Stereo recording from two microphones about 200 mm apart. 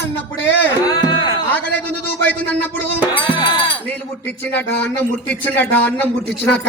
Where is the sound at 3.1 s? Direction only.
25° left (ahead or behind).